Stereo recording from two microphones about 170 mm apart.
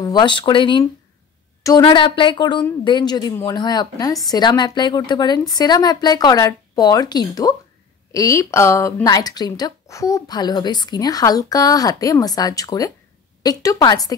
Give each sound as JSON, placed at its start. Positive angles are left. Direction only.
{"t": 0.0, "sound": "a woman's voice", "side_deg": 25}